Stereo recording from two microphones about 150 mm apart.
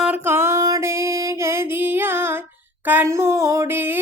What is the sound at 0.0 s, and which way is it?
Music, 15° right (ahead or behind).